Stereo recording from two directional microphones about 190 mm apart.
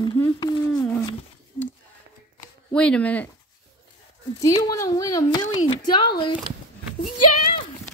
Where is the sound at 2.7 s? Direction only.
5° left (ahead or behind).